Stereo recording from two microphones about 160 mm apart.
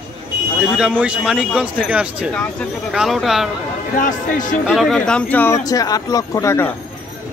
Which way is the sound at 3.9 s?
55° left (ahead or behind).